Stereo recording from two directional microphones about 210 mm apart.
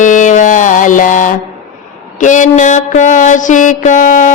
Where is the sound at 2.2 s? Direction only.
35° left (ahead or behind).